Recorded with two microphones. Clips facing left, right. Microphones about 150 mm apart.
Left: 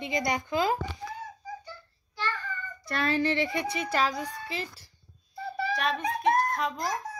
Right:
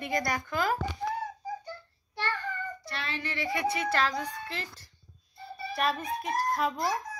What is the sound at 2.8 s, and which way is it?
Child singing, 45° left (ahead or behind).